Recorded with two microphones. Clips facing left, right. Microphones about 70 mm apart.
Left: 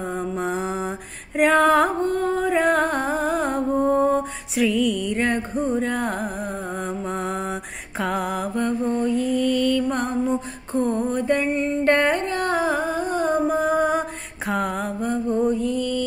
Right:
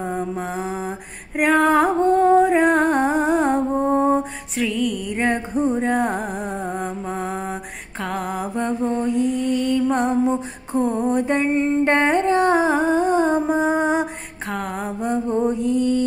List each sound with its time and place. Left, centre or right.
0.0 s mantra: centre
2.0 s music: right; by 3.5 s centre
3.5 s music: centre
4.2 s music: centre
5.2 s a sound: centre
6.3 s music: centre
8.5 s music: right
10.7 s music: centre
11.1 s music: right
14.5 s music: centre
14.9 s music: centre